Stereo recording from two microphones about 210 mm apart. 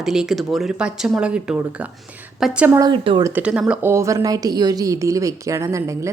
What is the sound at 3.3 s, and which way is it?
A woman's voice, 5° right (ahead or behind).